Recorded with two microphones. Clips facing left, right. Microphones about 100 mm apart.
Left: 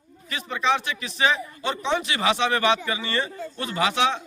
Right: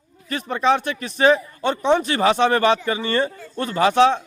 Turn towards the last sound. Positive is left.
turn(degrees=-45)  # may be behind; listen again after turning